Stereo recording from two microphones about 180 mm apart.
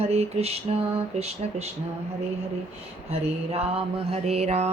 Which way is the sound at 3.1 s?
35° right (ahead or behind).